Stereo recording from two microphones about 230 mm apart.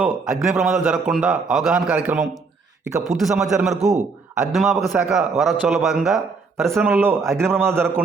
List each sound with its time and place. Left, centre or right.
0.0 s a man's voice: centre